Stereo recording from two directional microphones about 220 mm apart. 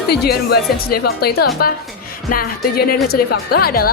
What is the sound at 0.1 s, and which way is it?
Speech, 45° left (ahead or behind).